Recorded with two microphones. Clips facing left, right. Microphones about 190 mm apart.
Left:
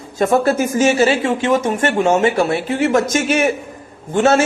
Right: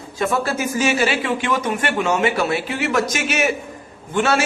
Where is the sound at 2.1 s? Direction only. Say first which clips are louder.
Left 3 dB; 45° left (ahead or behind).